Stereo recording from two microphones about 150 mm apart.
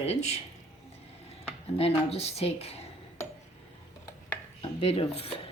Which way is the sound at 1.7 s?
45° left (ahead or behind).